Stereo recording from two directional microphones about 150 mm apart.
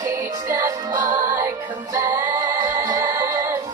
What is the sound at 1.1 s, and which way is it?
Music, 55° right (ahead or behind).